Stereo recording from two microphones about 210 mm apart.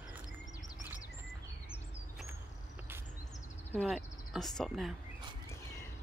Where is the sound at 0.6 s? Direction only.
20° left (ahead or behind).